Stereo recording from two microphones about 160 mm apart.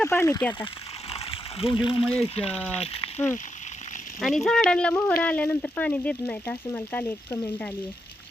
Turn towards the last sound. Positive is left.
turn(degrees=10)  # may be behind; listen again after turning